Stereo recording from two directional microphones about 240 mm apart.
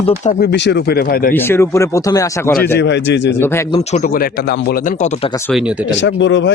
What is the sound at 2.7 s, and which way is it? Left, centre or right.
Speech, left.